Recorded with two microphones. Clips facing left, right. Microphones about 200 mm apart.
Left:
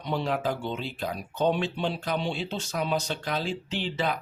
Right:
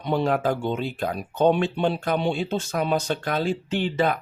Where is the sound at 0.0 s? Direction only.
55° right (ahead or behind).